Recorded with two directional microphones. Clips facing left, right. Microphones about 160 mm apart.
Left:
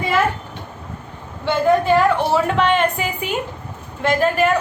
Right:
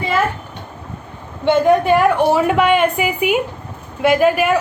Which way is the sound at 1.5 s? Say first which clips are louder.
Right 3 dB; 20° right (ahead or behind).